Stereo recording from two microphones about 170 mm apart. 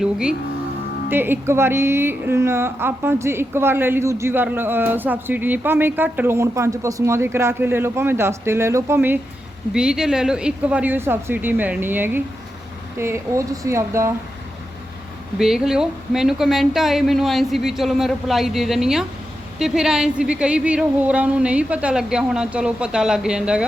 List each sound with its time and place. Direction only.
0.0 s music: 5° right (ahead or behind)
1.1 s a woman's voice: 10° right (ahead or behind)
15.4 s speech: 5° right (ahead or behind)